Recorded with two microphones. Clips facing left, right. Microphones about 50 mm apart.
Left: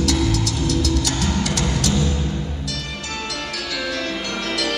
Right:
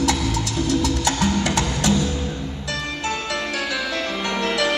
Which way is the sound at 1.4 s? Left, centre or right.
Right.